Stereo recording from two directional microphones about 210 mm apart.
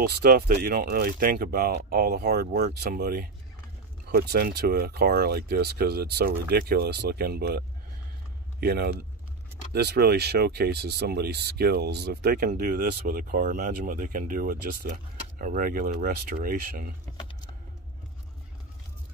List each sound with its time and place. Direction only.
0.0 s speech: 45° right (ahead or behind)